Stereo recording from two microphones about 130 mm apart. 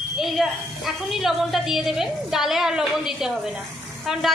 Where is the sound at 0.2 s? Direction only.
Centre (ahead or behind).